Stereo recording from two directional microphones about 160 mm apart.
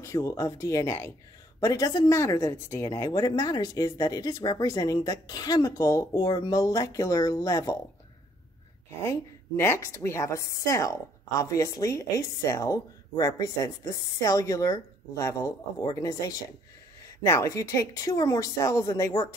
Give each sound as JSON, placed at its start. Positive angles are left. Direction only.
{"t": 0.0, "sound": "speech", "side_deg": 20}
{"t": 9.0, "sound": "a woman's voice", "side_deg": 15}